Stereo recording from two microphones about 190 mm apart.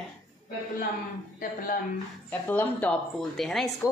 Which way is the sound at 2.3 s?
10° left (ahead or behind).